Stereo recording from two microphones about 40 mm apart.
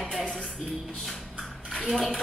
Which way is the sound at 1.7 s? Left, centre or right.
Centre.